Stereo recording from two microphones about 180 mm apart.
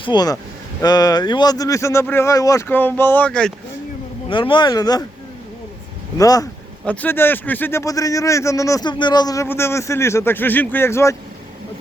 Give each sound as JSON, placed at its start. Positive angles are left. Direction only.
{"t": 0.0, "sound": "a man's voice", "side_deg": 25}
{"t": 4.3, "sound": "speech", "side_deg": 25}
{"t": 6.1, "sound": "speech", "side_deg": 20}
{"t": 6.8, "sound": "a man's voice", "side_deg": 10}